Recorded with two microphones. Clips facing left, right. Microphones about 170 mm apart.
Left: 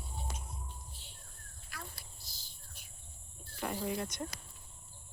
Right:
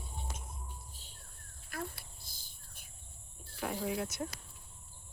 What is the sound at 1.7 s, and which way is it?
Insect, 50° right (ahead or behind).